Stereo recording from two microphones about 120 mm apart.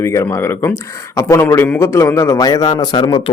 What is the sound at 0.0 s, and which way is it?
A man's voice, 25° left (ahead or behind).